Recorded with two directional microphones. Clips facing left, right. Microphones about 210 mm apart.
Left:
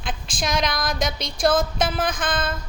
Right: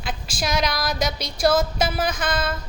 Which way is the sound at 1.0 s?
50° left (ahead or behind).